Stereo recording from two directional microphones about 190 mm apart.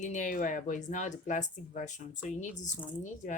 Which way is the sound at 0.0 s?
40° left (ahead or behind).